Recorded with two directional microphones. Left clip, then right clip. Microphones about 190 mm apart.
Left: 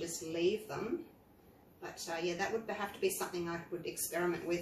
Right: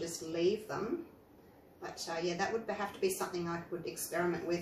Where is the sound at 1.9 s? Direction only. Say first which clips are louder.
Right 1 dB; 25° right (ahead or behind).